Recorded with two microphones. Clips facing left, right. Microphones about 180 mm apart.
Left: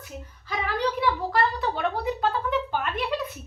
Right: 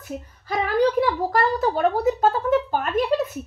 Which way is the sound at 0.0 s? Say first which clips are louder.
Right 7 dB; 45° right (ahead or behind).